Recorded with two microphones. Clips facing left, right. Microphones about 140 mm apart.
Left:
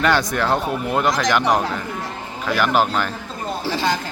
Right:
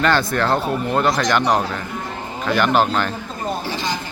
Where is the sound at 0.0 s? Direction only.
15° left (ahead or behind).